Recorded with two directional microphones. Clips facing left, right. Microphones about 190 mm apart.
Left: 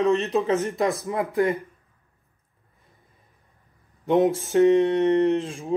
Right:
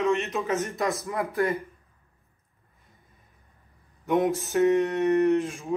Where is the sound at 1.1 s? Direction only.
25° left (ahead or behind).